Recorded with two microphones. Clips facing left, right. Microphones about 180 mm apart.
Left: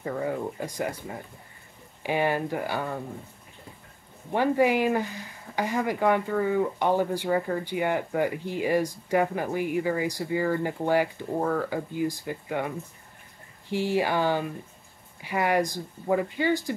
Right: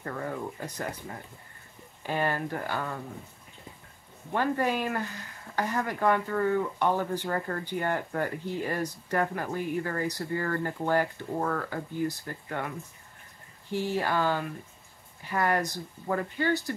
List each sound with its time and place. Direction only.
0.0 s speech: 10° left (ahead or behind)
4.3 s speech: 15° left (ahead or behind)